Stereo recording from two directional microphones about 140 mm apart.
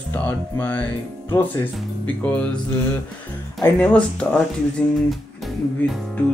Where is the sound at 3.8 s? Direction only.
10° left (ahead or behind).